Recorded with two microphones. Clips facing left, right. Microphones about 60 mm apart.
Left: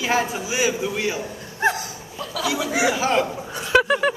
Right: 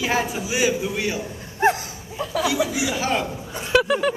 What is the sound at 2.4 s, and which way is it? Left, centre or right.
Speech, centre.